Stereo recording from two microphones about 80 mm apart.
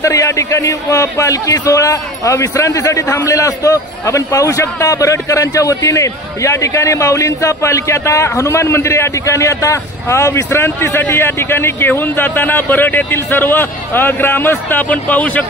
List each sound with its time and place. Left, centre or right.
0.0 s a man's voice: left; by 15.4 s centre